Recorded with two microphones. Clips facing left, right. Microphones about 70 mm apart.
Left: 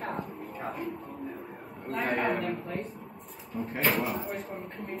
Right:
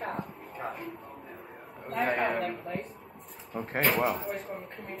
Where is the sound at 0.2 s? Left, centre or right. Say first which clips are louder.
Left 1 dB; centre.